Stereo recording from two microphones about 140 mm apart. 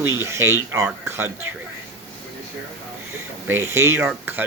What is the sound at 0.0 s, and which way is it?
Speech, 20° right (ahead or behind).